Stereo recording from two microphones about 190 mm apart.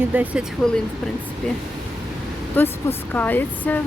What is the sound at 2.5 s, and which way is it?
Speech, 10° left (ahead or behind).